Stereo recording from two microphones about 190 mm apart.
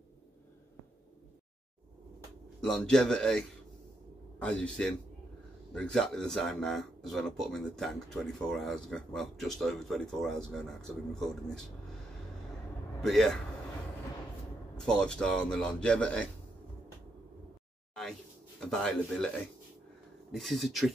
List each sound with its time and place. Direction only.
2.6 s a man's voice: 5° left (ahead or behind)
13.0 s a man's voice: centre (ahead or behind)
14.8 s a man's voice: 5° left (ahead or behind)
18.6 s a man's voice: 5° left (ahead or behind)